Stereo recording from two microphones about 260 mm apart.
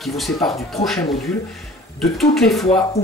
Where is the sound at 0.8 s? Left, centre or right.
Left.